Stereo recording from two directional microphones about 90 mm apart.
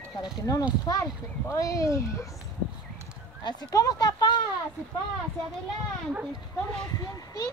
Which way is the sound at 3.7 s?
45° left (ahead or behind).